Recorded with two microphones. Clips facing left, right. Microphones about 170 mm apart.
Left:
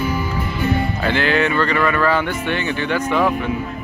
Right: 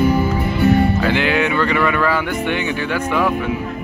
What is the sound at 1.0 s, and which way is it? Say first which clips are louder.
Speech: right 1 dB; 10° right (ahead or behind).